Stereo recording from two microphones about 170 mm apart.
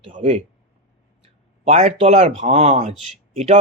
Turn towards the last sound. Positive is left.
turn(degrees=-40)  # may be behind; listen again after turning